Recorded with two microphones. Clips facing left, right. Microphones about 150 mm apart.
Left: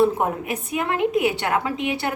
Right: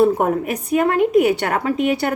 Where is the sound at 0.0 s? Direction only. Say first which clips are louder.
Right 4 dB; 50° right (ahead or behind).